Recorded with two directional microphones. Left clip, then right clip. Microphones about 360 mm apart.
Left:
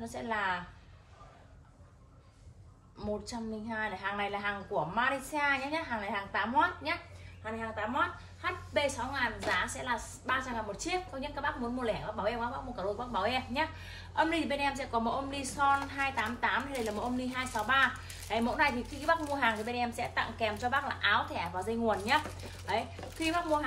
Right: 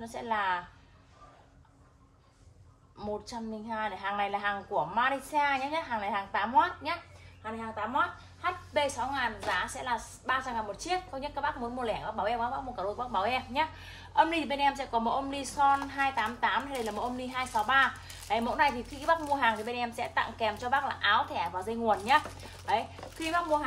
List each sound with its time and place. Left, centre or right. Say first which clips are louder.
0.0 s a woman's voice: right 3 dB; centre
3.0 s a woman's voice: right 1 dB; centre